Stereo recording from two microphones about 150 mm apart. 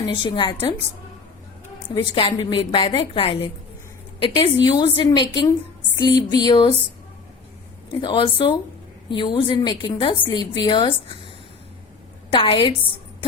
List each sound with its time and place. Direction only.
0.0 s a woman's voice: 30° left (ahead or behind)
2.1 s a woman's voice: 35° left (ahead or behind)
8.0 s a woman's voice: 30° left (ahead or behind)
12.3 s a woman's voice: 35° left (ahead or behind)